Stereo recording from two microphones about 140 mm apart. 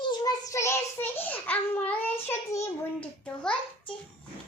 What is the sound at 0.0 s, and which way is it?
Child singing, 30° left (ahead or behind).